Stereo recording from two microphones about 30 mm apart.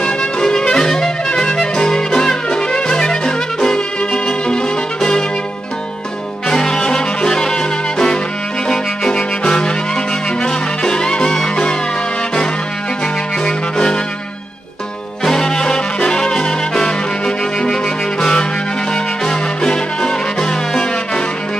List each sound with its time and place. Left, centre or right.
0.0 s music: left
6.5 s music: left
13.4 s music: left
15.2 s brass instrument: centre
17.6 s music: left